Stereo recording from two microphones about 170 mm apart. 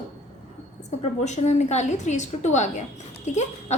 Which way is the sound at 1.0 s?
40° left (ahead or behind).